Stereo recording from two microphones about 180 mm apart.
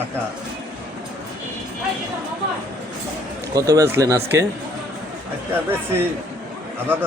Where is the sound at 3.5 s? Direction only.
20° right (ahead or behind).